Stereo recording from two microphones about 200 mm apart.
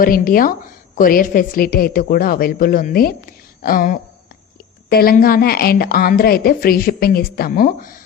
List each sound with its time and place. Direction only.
0.0 s a woman's voice: 45° left (ahead or behind)